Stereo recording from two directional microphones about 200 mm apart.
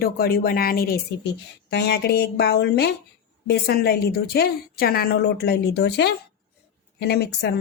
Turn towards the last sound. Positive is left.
turn(degrees=55)  # may be behind; listen again after turning